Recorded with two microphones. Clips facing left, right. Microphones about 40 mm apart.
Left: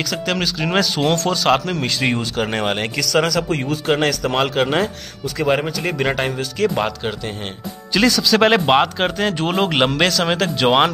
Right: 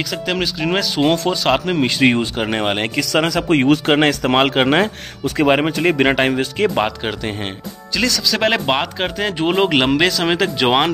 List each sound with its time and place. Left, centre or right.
0.3 s speech: centre
1.7 s speech: right
2.3 s speech: centre
3.4 s speech: right
3.9 s speech: right
8.0 s speech: centre
9.4 s speech: centre